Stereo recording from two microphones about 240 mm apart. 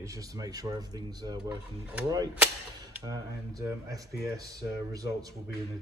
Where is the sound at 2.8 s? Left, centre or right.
Centre.